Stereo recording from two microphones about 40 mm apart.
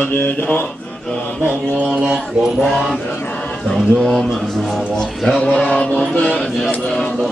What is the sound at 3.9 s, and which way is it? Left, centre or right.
Speech, centre.